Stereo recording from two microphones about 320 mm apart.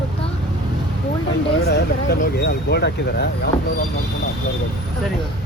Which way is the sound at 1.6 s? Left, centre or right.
Left.